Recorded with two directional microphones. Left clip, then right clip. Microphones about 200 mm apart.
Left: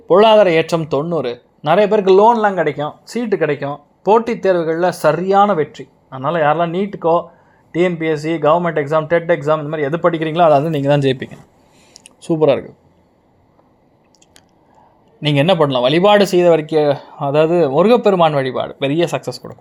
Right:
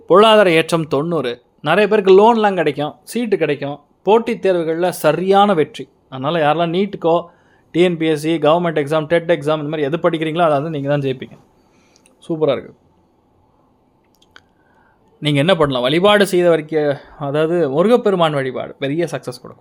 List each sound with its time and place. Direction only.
0.0 s speech: 15° right (ahead or behind)
15.2 s speech: 5° right (ahead or behind)